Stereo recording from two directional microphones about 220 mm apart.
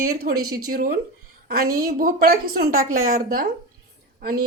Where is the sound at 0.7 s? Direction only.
40° right (ahead or behind).